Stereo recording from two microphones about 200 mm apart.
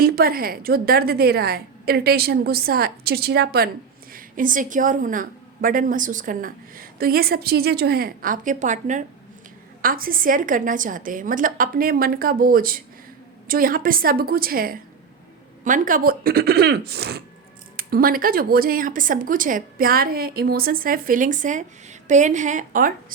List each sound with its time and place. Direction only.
0.0 s a woman's voice: 50° right (ahead or behind)